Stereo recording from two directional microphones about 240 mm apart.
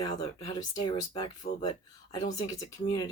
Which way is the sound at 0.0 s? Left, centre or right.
Centre.